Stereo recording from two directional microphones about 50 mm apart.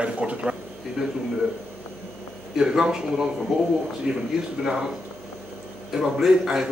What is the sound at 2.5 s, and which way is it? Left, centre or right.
Speech, centre.